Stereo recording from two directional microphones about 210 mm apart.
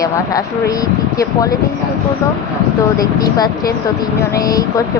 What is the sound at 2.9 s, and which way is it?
A woman's voice, 15° left (ahead or behind).